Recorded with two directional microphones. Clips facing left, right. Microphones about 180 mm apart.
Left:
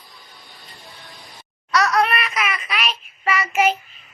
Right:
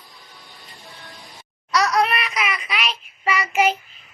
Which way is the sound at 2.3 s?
15° right (ahead or behind).